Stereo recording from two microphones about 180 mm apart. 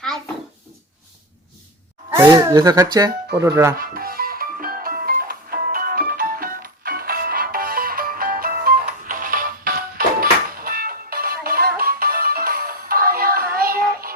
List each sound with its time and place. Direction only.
2.0 s speech: 15° right (ahead or behind)
3.8 s music: 55° right (ahead or behind)